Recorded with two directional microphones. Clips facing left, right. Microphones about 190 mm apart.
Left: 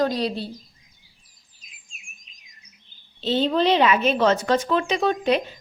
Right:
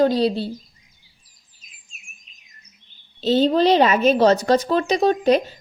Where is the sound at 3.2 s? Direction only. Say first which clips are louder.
Right 4 dB; 40° right (ahead or behind).